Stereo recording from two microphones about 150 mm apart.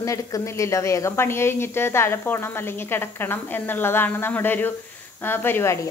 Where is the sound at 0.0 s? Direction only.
20° left (ahead or behind).